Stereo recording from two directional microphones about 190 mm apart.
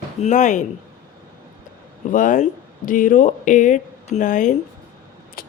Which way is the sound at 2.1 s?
45° left (ahead or behind).